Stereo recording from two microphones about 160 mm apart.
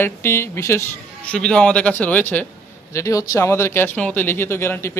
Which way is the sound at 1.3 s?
5° left (ahead or behind).